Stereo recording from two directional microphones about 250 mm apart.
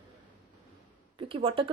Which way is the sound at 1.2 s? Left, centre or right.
Right.